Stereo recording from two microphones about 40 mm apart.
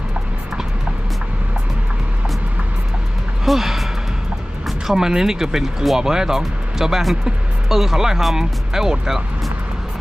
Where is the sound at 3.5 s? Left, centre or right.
Centre.